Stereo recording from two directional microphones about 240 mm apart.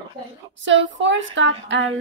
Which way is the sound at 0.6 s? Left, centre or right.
Right.